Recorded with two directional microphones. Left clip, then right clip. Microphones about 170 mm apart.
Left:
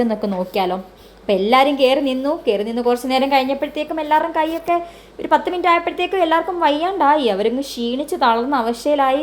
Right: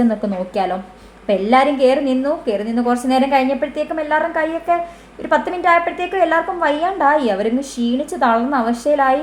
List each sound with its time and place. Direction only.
0.1 s a woman's voice: 25° left (ahead or behind)